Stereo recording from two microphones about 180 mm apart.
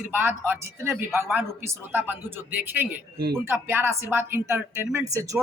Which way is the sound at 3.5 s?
10° right (ahead or behind).